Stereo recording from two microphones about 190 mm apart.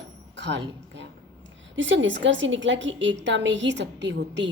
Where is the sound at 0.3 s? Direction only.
70° right (ahead or behind).